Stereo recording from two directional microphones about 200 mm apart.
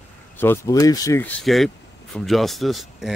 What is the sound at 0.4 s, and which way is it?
Speech, 15° left (ahead or behind).